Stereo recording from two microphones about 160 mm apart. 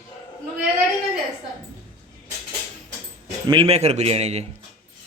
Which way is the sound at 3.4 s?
35° right (ahead or behind).